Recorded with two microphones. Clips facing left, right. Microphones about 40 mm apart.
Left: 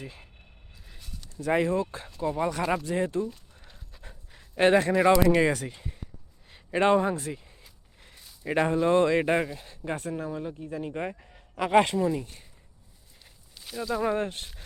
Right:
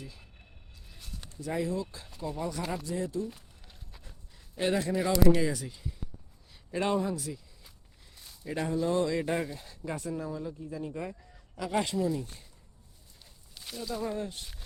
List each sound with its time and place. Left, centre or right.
0.0 s speech: left
0.9 s a sound: centre
1.4 s speech: left
4.0 s pant: left
5.4 s a man's voice: left
8.4 s speech: left
11.9 s speech: left
13.5 s a sound: centre
14.0 s speech: left